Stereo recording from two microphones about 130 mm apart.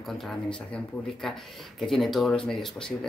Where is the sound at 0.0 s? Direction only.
5° left (ahead or behind).